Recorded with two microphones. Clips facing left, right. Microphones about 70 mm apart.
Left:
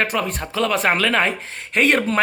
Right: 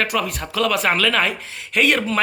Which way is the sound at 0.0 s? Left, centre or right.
Left.